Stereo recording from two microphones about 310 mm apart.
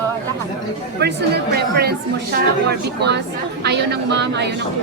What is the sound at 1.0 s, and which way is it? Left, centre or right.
A woman's voice, right.